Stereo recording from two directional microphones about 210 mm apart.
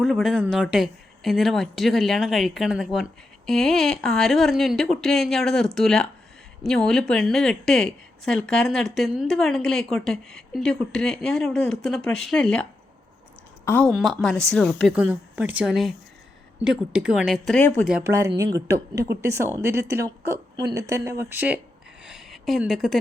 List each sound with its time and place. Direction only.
0.0 s speech: centre (ahead or behind)
13.7 s speech: 10° left (ahead or behind)
14.9 s speech: 5° right (ahead or behind)
17.8 s speech: 10° right (ahead or behind)
22.0 s a sound: centre (ahead or behind)